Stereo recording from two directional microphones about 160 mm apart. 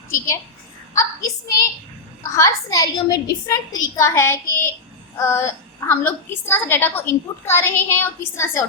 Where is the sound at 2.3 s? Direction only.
20° left (ahead or behind).